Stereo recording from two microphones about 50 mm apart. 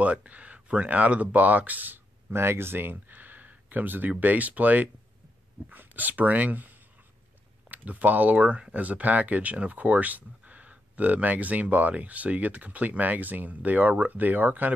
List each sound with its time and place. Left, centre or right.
0.0 s speech: right
2.3 s speech: right
7.7 s speech: right